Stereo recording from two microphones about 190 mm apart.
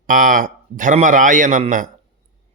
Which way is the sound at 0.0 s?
45° right (ahead or behind).